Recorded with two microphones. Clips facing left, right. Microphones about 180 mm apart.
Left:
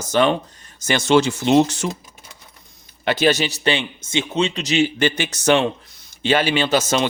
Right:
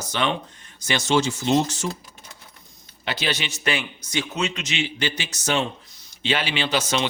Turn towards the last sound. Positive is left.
turn(degrees=45)  # may be behind; listen again after turning